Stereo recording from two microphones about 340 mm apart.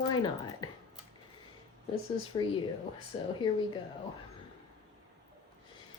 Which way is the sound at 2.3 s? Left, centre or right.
Centre.